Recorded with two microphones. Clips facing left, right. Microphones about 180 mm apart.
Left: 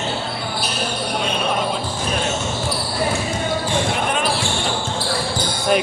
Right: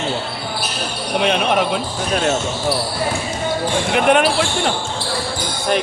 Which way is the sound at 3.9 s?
70° right (ahead or behind).